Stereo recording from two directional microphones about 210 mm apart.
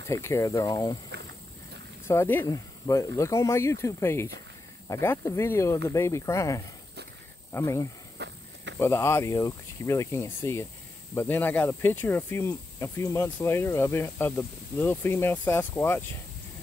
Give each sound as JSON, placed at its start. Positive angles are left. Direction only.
{"t": 0.0, "sound": "speech", "side_deg": 15}
{"t": 2.0, "sound": "speech", "side_deg": 10}
{"t": 8.2, "sound": "walk", "side_deg": -55}
{"t": 8.7, "sound": "speech", "side_deg": 10}